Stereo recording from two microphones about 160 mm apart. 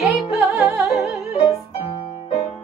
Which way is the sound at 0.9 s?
Centre (ahead or behind).